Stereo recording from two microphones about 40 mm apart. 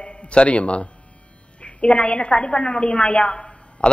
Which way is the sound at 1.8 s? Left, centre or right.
Left.